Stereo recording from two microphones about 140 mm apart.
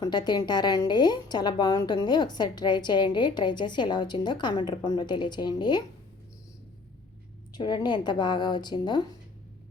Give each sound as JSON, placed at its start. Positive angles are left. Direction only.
{"t": 0.0, "sound": "a woman's voice", "side_deg": 30}
{"t": 7.5, "sound": "a woman's voice", "side_deg": 30}